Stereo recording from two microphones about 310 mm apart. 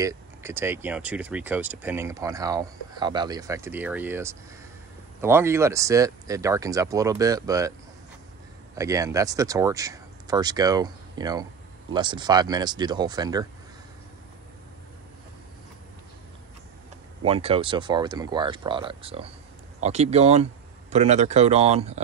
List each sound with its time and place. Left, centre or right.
0.0 s speech: centre
8.7 s speech: centre
17.2 s speech: centre